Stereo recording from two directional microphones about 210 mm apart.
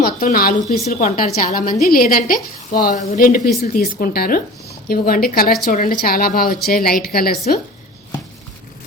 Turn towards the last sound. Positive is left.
turn(degrees=45)  # may be behind; listen again after turning